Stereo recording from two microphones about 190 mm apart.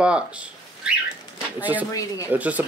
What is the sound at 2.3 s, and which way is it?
Speech, 10° right (ahead or behind).